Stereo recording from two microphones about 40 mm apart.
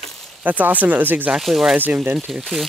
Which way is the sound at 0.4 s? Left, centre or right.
Right.